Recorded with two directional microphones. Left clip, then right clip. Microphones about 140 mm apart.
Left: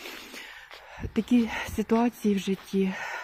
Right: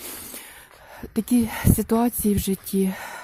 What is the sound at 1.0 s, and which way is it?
Speech, 40° right (ahead or behind).